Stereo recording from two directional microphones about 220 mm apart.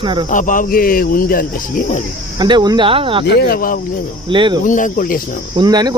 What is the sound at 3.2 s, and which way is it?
Speech, 45° left (ahead or behind).